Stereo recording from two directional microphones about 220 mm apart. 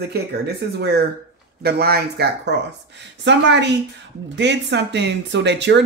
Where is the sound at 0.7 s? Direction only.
50° right (ahead or behind).